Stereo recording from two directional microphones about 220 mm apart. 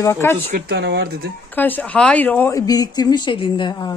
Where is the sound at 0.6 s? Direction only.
45° right (ahead or behind).